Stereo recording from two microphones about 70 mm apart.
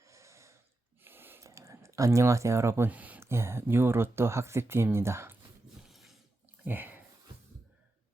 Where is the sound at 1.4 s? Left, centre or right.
Right.